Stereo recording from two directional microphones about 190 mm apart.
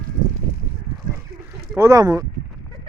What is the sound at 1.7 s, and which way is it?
Speech, 15° right (ahead or behind).